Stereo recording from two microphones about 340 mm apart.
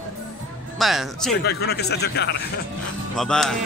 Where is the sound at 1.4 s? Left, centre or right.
Left.